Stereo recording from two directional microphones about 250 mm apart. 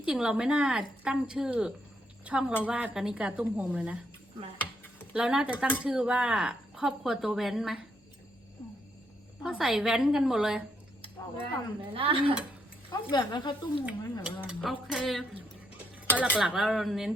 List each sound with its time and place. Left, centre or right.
0.0 s speech: centre
5.1 s speech: centre
9.4 s speech: centre
11.9 s speech: right
12.9 s speech: centre
13.8 s speech: centre